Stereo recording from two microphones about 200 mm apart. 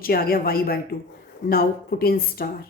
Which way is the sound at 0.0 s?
45° left (ahead or behind).